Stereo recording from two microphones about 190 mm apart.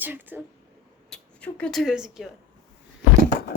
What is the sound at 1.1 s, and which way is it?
Speech, 5° left (ahead or behind).